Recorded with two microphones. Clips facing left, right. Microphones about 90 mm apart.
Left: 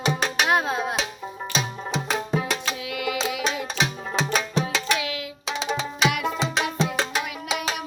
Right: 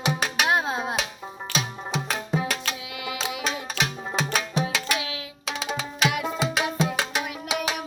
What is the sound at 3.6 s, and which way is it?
Music, 5° right (ahead or behind).